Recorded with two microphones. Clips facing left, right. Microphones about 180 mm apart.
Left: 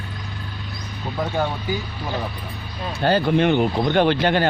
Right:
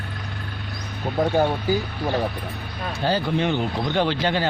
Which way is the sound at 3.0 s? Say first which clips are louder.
Left 5 dB; 60° left (ahead or behind).